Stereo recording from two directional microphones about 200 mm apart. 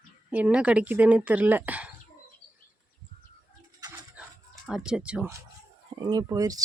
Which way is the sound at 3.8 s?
20° right (ahead or behind).